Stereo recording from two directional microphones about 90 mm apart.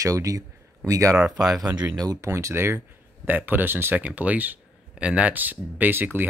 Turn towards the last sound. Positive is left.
turn(degrees=-25)  # may be behind; listen again after turning